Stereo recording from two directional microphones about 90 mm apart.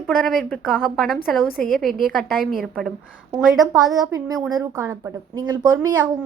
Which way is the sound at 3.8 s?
40° right (ahead or behind).